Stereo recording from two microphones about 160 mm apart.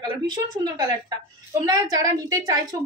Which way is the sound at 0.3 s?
25° right (ahead or behind).